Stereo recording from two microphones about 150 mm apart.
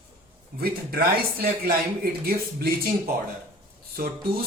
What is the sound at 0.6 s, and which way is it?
Speech, 90° right.